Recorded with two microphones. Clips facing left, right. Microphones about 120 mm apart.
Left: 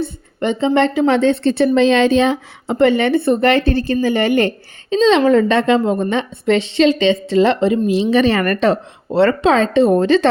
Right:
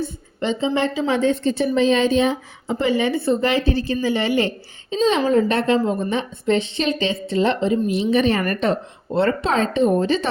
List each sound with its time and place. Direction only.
0.0 s a woman's voice: 60° left (ahead or behind)
4.9 s a woman's voice: 85° left